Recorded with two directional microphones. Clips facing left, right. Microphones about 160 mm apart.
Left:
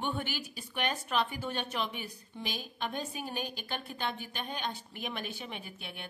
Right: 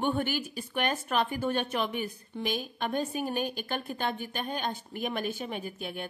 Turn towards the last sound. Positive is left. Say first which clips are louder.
# right 8 dB
turn(degrees=-45)  # may be behind; listen again after turning